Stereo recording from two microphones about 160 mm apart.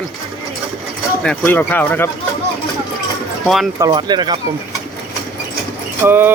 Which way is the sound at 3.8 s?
30° right (ahead or behind).